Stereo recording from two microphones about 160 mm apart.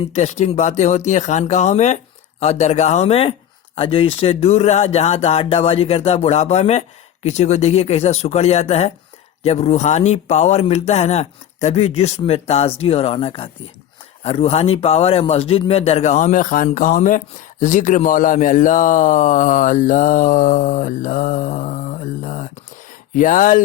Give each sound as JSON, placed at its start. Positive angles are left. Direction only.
{"t": 0.1, "sound": "a man's voice", "side_deg": 45}